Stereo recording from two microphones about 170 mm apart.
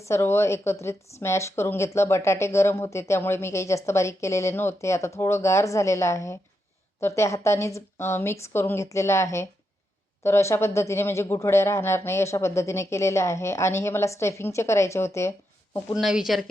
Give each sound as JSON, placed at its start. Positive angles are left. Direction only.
{"t": 0.1, "sound": "speech", "side_deg": 15}
{"t": 16.0, "sound": "speech", "side_deg": 0}